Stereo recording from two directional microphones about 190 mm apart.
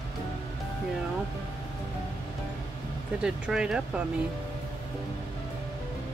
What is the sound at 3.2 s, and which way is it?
Speech, 5° right (ahead or behind).